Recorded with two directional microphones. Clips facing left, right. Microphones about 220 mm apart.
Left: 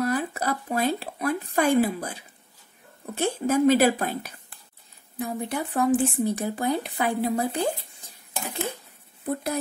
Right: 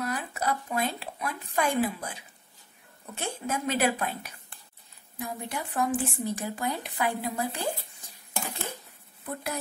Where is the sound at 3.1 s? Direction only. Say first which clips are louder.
Left 10 dB; 35° left (ahead or behind).